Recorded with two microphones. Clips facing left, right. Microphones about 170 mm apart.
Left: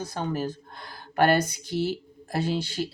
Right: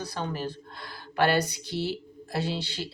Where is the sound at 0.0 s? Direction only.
50° left (ahead or behind).